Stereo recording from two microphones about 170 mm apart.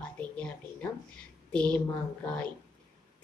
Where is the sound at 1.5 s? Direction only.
5° left (ahead or behind).